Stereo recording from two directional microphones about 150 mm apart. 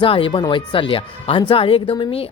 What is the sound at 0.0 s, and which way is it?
Speech, 35° left (ahead or behind).